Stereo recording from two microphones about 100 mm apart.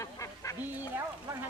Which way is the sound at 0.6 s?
20° right (ahead or behind).